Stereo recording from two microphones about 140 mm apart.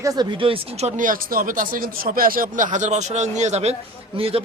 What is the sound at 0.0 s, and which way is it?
Speech, 30° right (ahead or behind).